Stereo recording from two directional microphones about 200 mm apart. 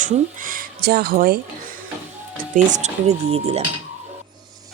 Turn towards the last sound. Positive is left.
turn(degrees=-30)  # may be behind; listen again after turning